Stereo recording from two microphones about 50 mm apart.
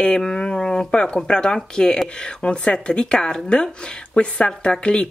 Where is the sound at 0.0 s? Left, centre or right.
Centre.